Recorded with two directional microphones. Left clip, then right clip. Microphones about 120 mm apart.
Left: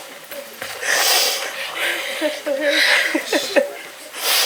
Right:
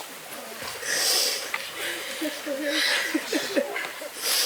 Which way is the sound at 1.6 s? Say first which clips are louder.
Left 10 dB; 20° right (ahead or behind).